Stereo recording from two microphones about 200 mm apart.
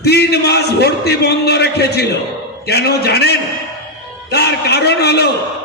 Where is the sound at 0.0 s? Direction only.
55° left (ahead or behind).